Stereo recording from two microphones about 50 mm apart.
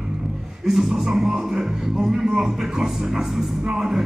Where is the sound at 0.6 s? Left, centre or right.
Centre.